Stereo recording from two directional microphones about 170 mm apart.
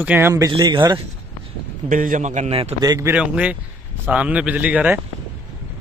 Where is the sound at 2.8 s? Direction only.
20° right (ahead or behind).